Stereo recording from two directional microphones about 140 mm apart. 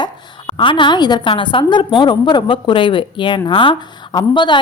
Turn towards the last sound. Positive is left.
turn(degrees=35)  # may be behind; listen again after turning